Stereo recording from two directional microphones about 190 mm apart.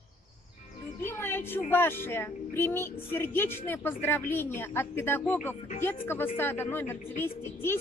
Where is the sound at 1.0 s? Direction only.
10° left (ahead or behind).